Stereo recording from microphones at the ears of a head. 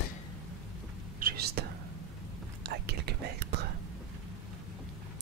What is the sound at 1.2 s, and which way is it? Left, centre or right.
Whispering, right.